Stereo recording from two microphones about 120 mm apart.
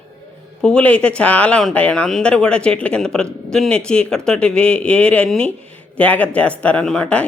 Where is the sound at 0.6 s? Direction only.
10° left (ahead or behind).